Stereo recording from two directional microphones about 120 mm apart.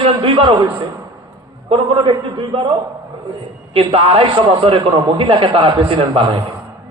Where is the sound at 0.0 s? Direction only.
45° right (ahead or behind).